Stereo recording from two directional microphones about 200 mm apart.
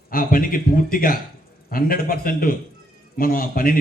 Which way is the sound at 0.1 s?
45° left (ahead or behind).